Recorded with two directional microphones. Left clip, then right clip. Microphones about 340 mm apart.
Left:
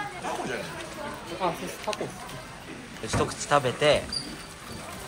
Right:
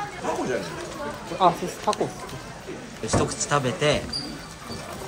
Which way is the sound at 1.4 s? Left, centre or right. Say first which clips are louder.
Right 10 dB; right.